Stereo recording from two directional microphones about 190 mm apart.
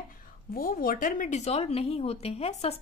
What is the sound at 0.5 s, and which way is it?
Speech, 50° left (ahead or behind).